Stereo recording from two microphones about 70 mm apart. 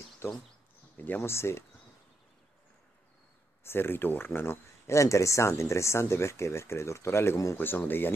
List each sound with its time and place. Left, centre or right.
0.2 s speech: left
0.9 s speech: left
1.3 s speech: left
3.6 s speech: left
4.8 s speech: left
7.5 s speech: left